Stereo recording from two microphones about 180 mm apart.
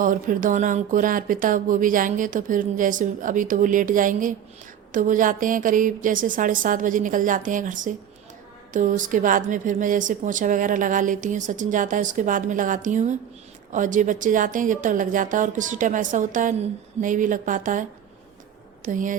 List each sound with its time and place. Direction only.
0.0 s a woman's voice: 50° right (ahead or behind)
18.9 s a woman's voice: 45° right (ahead or behind)